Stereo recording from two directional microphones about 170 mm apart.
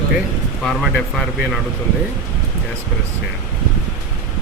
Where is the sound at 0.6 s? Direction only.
Centre (ahead or behind).